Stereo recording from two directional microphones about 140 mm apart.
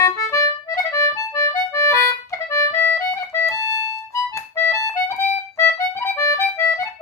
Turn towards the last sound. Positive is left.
turn(degrees=20)  # may be behind; listen again after turning